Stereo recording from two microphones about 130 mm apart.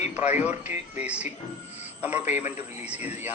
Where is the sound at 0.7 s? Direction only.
60° left (ahead or behind).